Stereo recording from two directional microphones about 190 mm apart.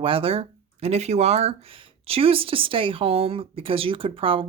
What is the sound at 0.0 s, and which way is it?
Speech, 30° right (ahead or behind).